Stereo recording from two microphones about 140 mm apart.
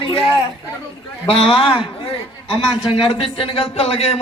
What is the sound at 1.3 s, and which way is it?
Speech, 40° left (ahead or behind).